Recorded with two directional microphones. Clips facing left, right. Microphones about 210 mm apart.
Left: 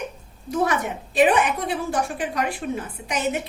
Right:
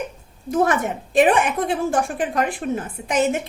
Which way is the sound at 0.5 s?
50° right (ahead or behind).